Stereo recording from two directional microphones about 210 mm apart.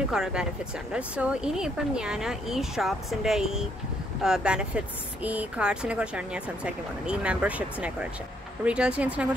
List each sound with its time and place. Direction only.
0.1 s speech: 5° right (ahead or behind)